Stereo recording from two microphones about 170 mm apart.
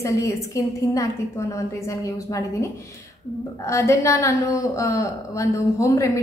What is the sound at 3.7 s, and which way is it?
A woman's voice, 15° left (ahead or behind).